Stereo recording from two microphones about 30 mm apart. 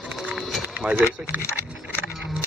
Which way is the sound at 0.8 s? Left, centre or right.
Right.